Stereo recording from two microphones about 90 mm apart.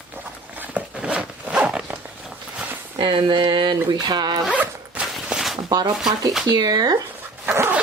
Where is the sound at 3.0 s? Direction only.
65° right (ahead or behind).